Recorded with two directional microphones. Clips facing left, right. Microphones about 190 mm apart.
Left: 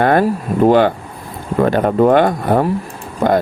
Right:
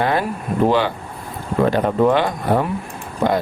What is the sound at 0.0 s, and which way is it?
Speech, 55° left (ahead or behind).